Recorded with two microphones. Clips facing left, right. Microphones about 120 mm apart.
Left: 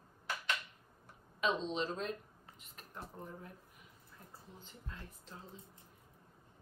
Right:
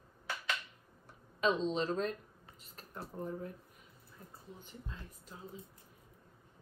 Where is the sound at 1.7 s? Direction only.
40° right (ahead or behind).